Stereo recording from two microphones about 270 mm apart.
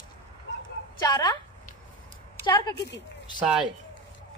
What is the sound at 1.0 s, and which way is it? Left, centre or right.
Speech, centre.